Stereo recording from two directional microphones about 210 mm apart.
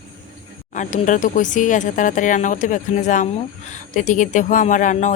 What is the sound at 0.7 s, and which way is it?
Speech, 35° left (ahead or behind).